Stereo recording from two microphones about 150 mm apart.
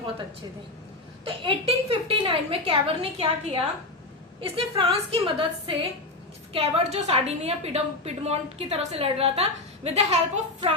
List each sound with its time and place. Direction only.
1.2 s a woman's voice: 35° right (ahead or behind)